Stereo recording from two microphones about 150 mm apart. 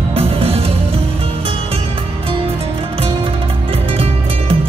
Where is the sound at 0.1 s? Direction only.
40° right (ahead or behind).